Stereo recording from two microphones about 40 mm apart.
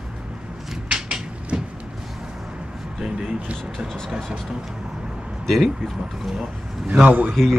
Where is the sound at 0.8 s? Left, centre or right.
Right.